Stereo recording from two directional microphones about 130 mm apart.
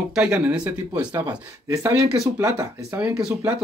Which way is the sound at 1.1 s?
30° right (ahead or behind).